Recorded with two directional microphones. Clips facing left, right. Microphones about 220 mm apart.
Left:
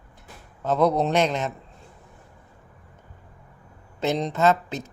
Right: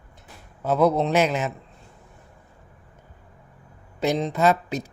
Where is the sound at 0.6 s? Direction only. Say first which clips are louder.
Right 1 dB; 5° right (ahead or behind).